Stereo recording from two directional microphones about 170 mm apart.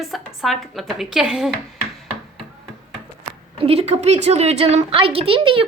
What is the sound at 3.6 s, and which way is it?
A woman's voice, 35° right (ahead or behind).